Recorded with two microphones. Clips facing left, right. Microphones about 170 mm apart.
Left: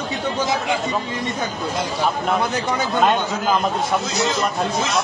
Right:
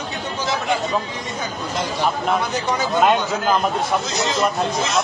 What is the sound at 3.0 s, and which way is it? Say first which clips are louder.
Speech: right 1 dB; centre (ahead or behind).